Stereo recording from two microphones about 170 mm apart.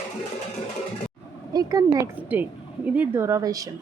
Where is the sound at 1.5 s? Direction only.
20° right (ahead or behind).